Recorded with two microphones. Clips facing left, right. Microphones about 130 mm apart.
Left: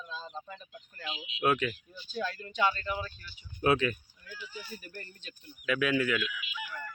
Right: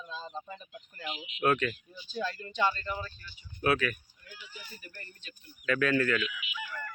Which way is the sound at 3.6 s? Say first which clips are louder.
Left 2 dB; 25° left (ahead or behind).